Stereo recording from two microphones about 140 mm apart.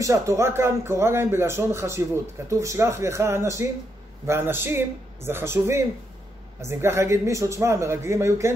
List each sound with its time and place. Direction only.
0.0 s speech: 20° right (ahead or behind)